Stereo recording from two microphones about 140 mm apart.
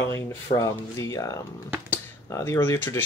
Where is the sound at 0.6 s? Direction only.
20° left (ahead or behind).